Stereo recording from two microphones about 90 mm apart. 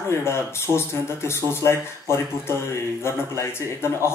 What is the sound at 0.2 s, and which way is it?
Speech, 30° left (ahead or behind).